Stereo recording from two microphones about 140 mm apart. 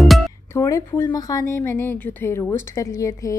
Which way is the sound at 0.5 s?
20° left (ahead or behind).